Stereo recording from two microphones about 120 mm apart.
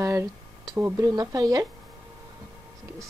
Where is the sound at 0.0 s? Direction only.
25° right (ahead or behind).